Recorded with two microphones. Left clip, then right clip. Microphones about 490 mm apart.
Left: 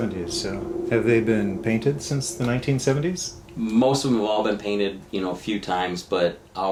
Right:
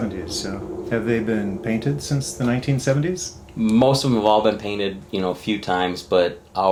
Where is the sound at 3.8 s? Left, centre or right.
Right.